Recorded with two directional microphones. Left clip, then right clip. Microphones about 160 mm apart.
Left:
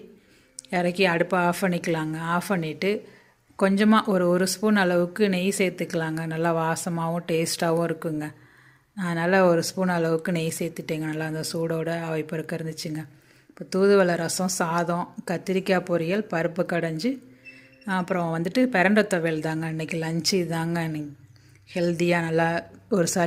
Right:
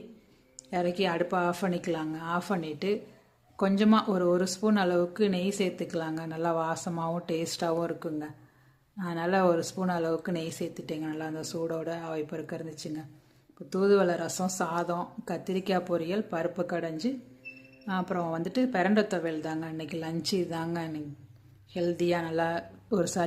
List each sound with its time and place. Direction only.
0.7 s speech: 25° left (ahead or behind)